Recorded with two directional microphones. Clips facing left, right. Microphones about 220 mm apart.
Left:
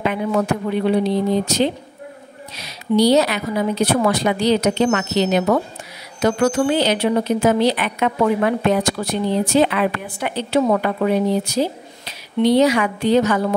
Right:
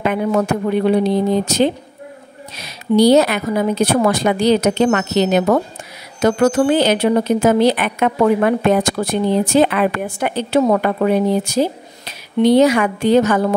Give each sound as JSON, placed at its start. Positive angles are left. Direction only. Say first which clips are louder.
{"t": 0.0, "sound": "speech", "louder": "right 3 dB", "side_deg": -50}